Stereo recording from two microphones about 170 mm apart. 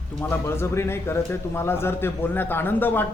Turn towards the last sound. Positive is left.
turn(degrees=10)  # may be behind; listen again after turning